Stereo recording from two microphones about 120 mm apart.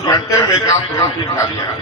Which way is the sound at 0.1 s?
25° left (ahead or behind).